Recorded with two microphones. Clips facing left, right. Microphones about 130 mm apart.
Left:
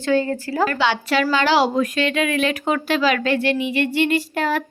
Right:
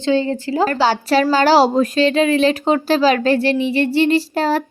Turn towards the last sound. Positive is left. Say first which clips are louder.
# right 4 dB
turn(degrees=-35)  # may be behind; listen again after turning